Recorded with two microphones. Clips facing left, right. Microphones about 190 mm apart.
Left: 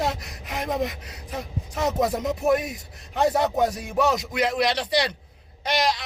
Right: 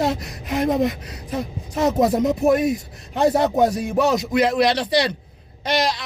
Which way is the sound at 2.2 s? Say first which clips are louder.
Right 5 dB; 35° right (ahead or behind).